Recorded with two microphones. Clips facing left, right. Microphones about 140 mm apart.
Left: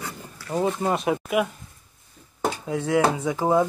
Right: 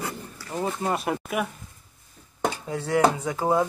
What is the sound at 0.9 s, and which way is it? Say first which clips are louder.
Speech: left 4 dB; centre (ahead or behind).